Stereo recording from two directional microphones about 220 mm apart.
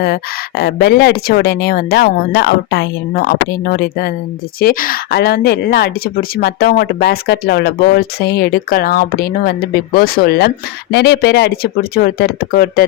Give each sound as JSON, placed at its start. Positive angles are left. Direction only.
{"t": 0.0, "sound": "speech", "side_deg": 45}